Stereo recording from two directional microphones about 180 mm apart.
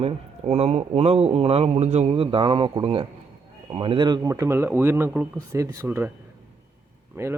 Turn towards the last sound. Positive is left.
turn(degrees=-15)  # may be behind; listen again after turning